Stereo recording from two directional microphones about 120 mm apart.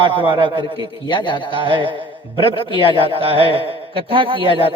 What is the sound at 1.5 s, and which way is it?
Speech, 45° right (ahead or behind).